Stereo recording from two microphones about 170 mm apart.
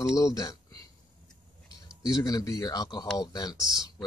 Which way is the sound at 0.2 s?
20° left (ahead or behind).